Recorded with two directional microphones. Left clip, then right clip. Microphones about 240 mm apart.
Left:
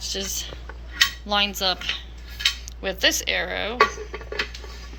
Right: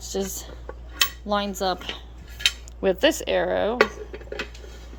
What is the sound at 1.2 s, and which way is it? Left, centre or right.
Speech, right.